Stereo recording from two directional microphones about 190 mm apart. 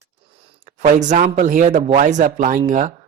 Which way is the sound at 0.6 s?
40° right (ahead or behind).